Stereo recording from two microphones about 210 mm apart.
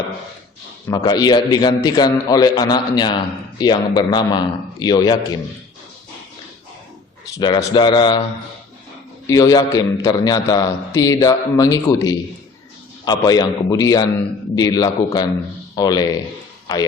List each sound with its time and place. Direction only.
0.9 s a man's voice: 20° left (ahead or behind)
7.3 s a man's voice: 20° left (ahead or behind)
9.2 s a man's voice: 15° left (ahead or behind)